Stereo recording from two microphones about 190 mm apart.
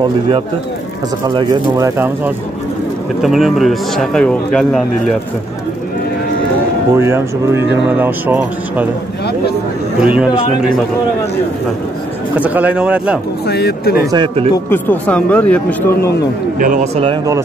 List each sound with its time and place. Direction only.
1.2 s speech: 20° right (ahead or behind)
3.2 s speech: centre (ahead or behind)
7.0 s speech: 15° right (ahead or behind)
9.9 s speech: 5° right (ahead or behind)
12.4 s speech: 10° right (ahead or behind)
13.5 s speech: 60° left (ahead or behind)
14.1 s speech: 30° right (ahead or behind)
14.7 s a man's voice: 10° left (ahead or behind)
16.5 s speech: 45° right (ahead or behind); by 17.4 s 25° right (ahead or behind)